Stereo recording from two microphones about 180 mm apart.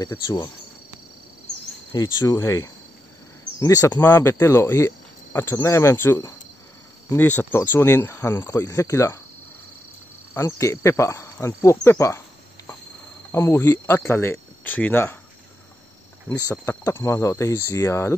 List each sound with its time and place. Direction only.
1.9 s speech: 20° left (ahead or behind)
10.3 s speech: 15° left (ahead or behind)
13.3 s speech: 15° left (ahead or behind)
16.3 s speech: 15° left (ahead or behind)